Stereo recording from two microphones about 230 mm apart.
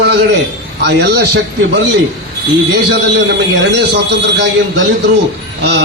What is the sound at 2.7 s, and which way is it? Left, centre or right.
A man's voice, right.